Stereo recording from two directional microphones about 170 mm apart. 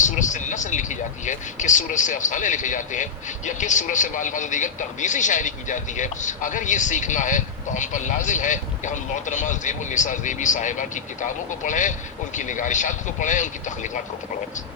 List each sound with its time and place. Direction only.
0.0 s speech: 45° left (ahead or behind)